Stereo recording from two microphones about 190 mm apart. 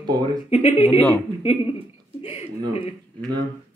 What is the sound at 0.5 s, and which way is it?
Speech, 35° left (ahead or behind).